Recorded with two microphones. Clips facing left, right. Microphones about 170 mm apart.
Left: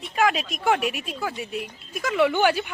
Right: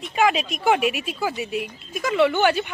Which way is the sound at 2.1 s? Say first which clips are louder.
Right 2 dB; 10° left (ahead or behind).